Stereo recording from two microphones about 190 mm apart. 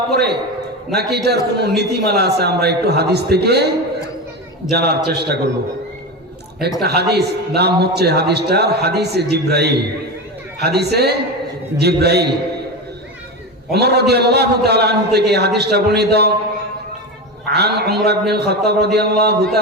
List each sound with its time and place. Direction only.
0.1 s a man's voice: 60° right (ahead or behind)
4.7 s a man's voice: 60° right (ahead or behind)
6.6 s a man's voice: 60° right (ahead or behind)
13.7 s a man's voice: 60° right (ahead or behind)
17.4 s a man's voice: 60° right (ahead or behind)